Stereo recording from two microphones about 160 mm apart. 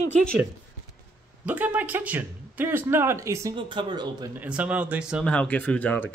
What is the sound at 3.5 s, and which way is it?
Speech, 30° right (ahead or behind).